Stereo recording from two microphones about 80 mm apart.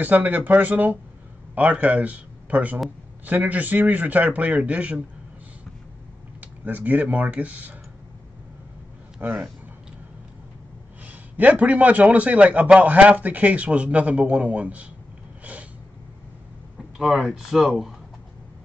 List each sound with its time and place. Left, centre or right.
0.0 s a man's voice: right
6.4 s a man's voice: right
9.2 s a man's voice: right
11.1 s a man's voice: centre
17.0 s speech: centre